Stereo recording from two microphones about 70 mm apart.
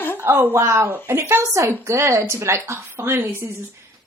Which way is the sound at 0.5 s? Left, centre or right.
Right.